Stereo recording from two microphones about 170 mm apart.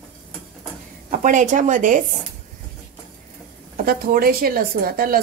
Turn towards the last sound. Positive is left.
turn(degrees=-60)  # may be behind; listen again after turning